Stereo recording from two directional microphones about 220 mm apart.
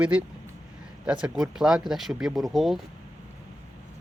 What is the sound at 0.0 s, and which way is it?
Speech, 5° right (ahead or behind).